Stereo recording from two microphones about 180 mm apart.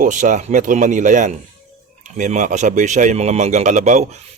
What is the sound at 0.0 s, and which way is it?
Speech, 45° right (ahead or behind).